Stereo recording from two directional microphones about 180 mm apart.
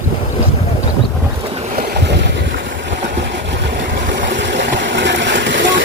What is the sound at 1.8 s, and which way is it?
Boat, 70° right (ahead or behind).